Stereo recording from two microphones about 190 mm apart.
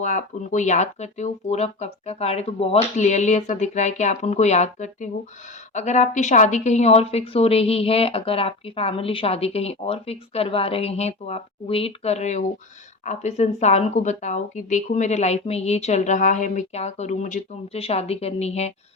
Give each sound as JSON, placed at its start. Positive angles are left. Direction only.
{"t": 0.0, "sound": "a woman's voice", "side_deg": 40}